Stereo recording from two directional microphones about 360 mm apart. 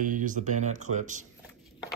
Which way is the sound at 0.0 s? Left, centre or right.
Right.